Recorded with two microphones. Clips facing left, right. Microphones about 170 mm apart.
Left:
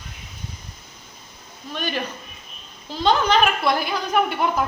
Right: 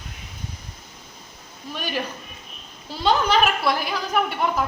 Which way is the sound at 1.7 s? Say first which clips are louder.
Left 1 dB; 10° right (ahead or behind).